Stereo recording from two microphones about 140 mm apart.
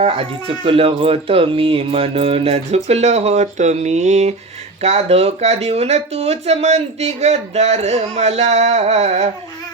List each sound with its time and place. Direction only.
0.0 s speech: 45° right (ahead or behind)